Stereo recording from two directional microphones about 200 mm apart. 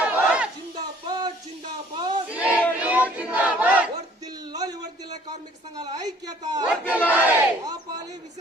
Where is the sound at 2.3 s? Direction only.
5° right (ahead or behind).